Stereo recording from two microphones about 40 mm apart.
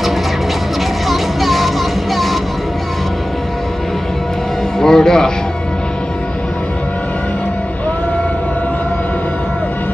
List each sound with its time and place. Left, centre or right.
1.0 s music: centre
4.7 s music: centre